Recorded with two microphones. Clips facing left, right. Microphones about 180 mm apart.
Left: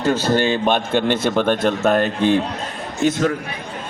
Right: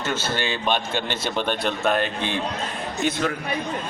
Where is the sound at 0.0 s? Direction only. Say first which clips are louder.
Left 9 dB; 35° left (ahead or behind).